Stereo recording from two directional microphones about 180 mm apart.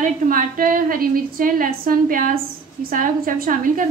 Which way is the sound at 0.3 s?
50° right (ahead or behind).